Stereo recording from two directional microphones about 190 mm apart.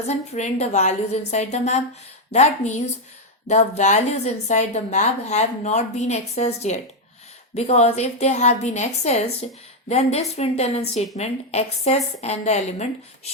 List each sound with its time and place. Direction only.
0.1 s a woman's voice: 40° left (ahead or behind)